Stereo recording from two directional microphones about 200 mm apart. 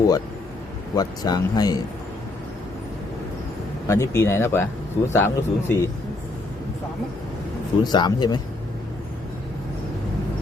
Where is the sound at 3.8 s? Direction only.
15° left (ahead or behind).